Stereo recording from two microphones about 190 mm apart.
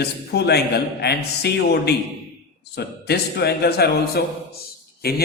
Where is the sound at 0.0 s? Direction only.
60° left (ahead or behind).